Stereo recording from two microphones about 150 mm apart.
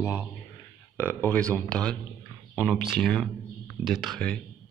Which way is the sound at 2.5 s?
5° right (ahead or behind).